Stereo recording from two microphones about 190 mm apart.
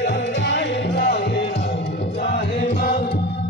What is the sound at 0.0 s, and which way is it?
Music, 70° left (ahead or behind).